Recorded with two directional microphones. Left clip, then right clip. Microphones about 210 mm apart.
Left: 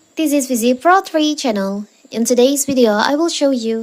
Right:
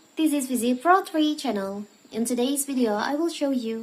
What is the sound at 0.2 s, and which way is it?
Speech, 35° left (ahead or behind).